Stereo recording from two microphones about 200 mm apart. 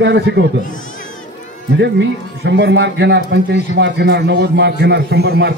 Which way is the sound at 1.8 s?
60° right (ahead or behind).